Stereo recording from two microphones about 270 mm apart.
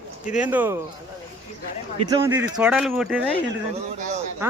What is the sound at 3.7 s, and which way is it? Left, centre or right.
Speech, right.